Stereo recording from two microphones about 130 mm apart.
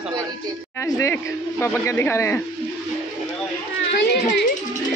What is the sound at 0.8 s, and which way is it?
Speech, 20° left (ahead or behind).